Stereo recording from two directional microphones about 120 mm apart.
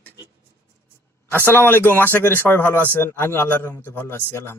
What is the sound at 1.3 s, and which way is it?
Speech, 15° left (ahead or behind).